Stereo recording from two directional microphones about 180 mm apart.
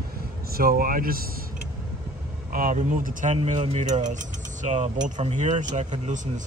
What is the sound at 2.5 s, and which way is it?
Speech, 50° right (ahead or behind).